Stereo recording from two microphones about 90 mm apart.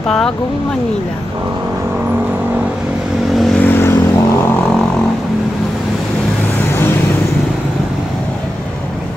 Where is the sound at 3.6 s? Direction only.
25° left (ahead or behind).